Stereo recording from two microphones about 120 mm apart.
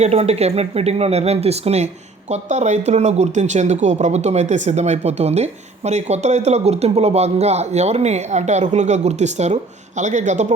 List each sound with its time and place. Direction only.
0.0 s speech: 60° right (ahead or behind)
10.0 s a man's voice: 80° right